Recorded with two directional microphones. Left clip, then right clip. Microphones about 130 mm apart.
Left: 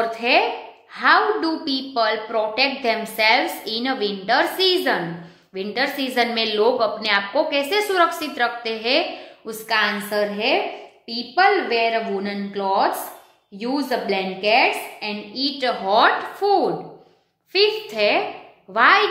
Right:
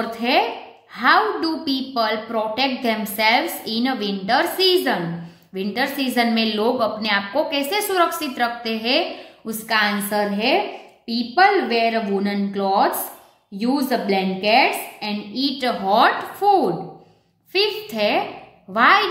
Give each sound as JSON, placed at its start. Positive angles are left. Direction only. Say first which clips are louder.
{"t": 0.0, "sound": "a woman's voice", "louder": "left 1 dB", "side_deg": -30}